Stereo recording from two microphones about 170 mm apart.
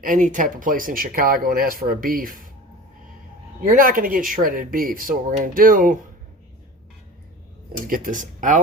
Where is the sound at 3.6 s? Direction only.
55° right (ahead or behind).